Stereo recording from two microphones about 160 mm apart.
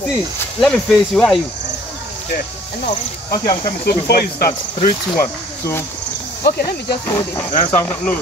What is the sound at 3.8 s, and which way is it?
Speech, 75° left (ahead or behind).